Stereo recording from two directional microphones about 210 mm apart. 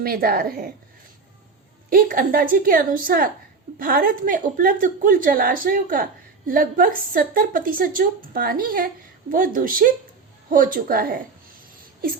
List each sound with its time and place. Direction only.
0.0 s speech: 45° right (ahead or behind)
1.9 s a woman's voice: 40° right (ahead or behind)